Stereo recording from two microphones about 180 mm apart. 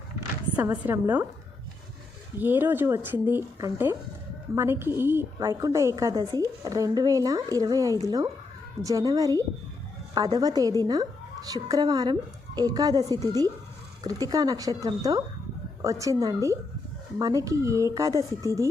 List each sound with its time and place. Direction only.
0.5 s speech: 10° right (ahead or behind)
2.4 s a woman's voice: 10° right (ahead or behind)